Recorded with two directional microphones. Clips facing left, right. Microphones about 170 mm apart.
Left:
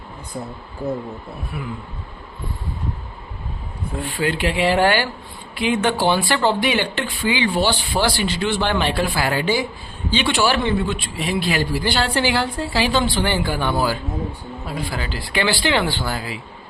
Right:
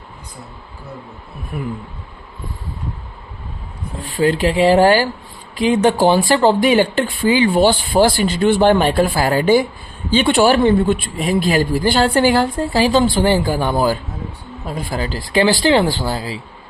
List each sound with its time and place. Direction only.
4.0 s speech: 40° right (ahead or behind)